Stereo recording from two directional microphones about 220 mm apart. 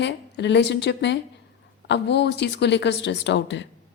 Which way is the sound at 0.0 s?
50° left (ahead or behind).